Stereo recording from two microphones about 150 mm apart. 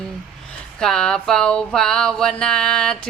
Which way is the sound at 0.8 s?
5° left (ahead or behind).